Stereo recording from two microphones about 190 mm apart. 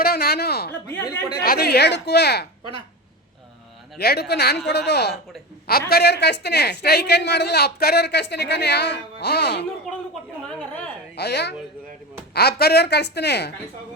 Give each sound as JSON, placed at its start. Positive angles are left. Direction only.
{"t": 0.0, "sound": "a woman's voice", "side_deg": 55}
{"t": 0.9, "sound": "speech", "side_deg": 15}
{"t": 1.4, "sound": "a woman's voice", "side_deg": 55}
{"t": 3.9, "sound": "a woman's voice", "side_deg": 55}
{"t": 11.2, "sound": "a woman's voice", "side_deg": 60}